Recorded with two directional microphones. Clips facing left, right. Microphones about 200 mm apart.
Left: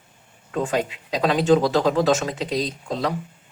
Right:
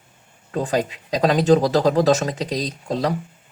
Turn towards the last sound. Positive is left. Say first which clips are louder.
# right 2 dB
turn(degrees=-40)  # may be behind; listen again after turning